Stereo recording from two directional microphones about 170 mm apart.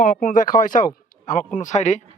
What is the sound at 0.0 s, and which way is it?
Speech, 55° left (ahead or behind).